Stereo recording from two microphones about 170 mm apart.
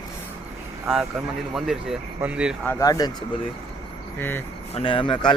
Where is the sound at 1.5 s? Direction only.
5° right (ahead or behind).